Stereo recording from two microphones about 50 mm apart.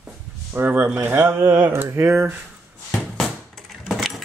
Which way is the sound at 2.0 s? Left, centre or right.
Right.